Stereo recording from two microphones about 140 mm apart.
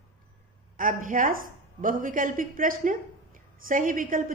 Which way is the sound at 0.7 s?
75° right (ahead or behind).